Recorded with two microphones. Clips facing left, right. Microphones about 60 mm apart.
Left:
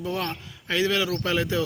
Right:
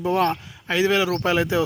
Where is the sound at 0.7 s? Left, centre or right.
Centre.